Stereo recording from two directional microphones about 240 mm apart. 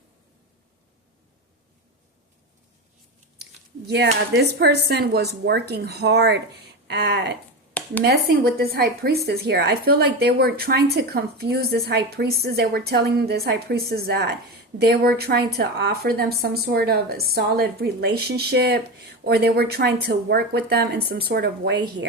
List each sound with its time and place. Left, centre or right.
3.8 s speech: right
7.7 s a sound: centre
8.0 s speech: right